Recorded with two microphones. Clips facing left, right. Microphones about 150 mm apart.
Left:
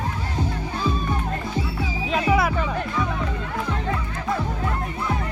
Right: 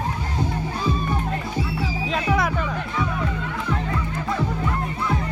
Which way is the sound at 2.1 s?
5° left (ahead or behind).